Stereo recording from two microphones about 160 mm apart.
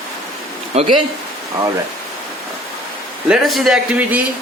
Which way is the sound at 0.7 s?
40° right (ahead or behind).